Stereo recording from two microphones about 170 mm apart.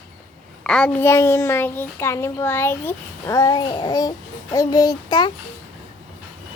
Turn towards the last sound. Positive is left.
turn(degrees=25)  # may be behind; listen again after turning